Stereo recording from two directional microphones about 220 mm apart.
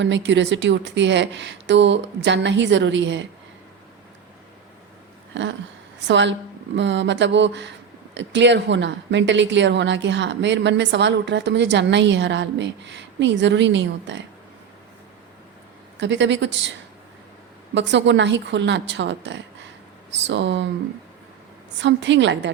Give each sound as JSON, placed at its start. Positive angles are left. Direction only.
{"t": 0.0, "sound": "a woman's voice", "side_deg": -55}
{"t": 5.3, "sound": "a sound", "side_deg": -55}
{"t": 6.1, "sound": "a woman's voice", "side_deg": -55}
{"t": 16.0, "sound": "speech", "side_deg": -55}
{"t": 17.7, "sound": "a woman's voice", "side_deg": -55}
{"t": 21.8, "sound": "a woman's voice", "side_deg": -55}